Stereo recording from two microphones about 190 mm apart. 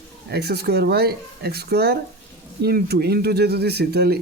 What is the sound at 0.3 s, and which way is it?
Speech, 60° right (ahead or behind).